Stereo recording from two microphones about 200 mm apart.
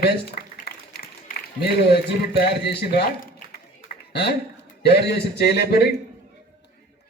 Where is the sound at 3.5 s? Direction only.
50° left (ahead or behind).